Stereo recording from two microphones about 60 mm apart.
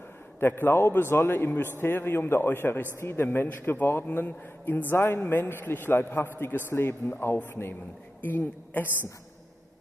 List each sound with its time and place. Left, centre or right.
0.4 s a man's voice: left